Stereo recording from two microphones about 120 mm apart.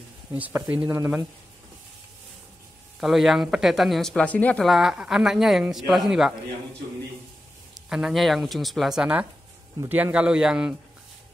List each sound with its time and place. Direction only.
0.3 s a man's voice: 15° right (ahead or behind)
3.0 s speech: centre (ahead or behind)
4.6 s speech: 5° right (ahead or behind)
7.9 s a man's voice: centre (ahead or behind)